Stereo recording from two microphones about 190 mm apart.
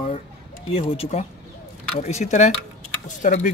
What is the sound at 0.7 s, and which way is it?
A man's voice, 30° left (ahead or behind).